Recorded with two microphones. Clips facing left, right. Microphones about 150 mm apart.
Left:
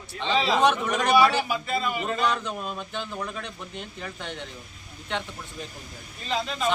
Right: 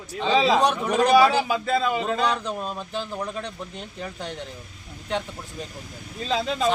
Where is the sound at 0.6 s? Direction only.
35° right (ahead or behind).